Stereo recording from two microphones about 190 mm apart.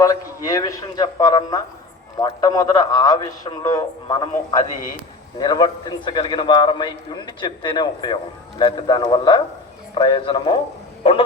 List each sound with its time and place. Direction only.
0.0 s a man's voice: 20° left (ahead or behind)